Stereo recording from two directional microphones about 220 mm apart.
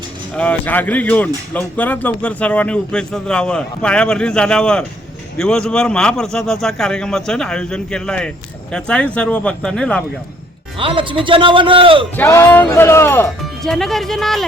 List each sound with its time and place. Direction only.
0.3 s speech: 5° left (ahead or behind)
10.8 s a man's voice: 25° right (ahead or behind)
12.1 s speech: 10° left (ahead or behind)